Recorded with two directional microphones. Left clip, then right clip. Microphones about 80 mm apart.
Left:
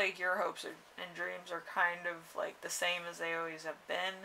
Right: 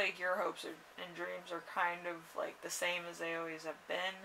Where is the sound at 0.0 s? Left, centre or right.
Left.